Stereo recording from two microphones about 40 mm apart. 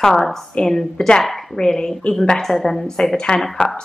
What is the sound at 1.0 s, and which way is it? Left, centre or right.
Speech, left.